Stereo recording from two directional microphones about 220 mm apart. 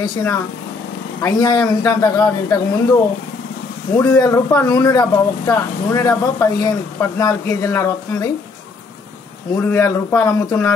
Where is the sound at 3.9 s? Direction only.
15° left (ahead or behind).